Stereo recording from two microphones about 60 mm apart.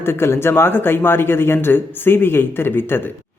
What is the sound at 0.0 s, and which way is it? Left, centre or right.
A man's voice, left.